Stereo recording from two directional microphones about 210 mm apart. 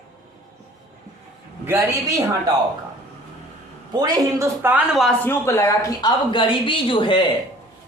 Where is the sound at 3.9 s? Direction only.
20° right (ahead or behind); by 7.2 s 25° left (ahead or behind).